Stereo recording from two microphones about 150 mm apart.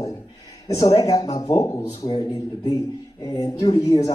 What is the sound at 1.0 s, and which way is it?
Speech, 25° left (ahead or behind).